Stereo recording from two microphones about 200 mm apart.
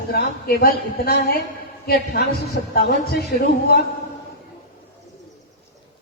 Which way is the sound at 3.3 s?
50° left (ahead or behind).